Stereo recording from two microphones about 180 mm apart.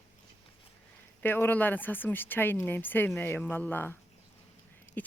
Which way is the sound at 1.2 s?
10° left (ahead or behind).